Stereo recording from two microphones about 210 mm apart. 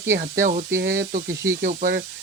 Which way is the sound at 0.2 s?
40° right (ahead or behind).